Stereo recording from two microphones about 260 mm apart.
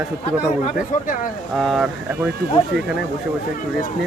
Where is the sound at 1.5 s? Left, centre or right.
Centre.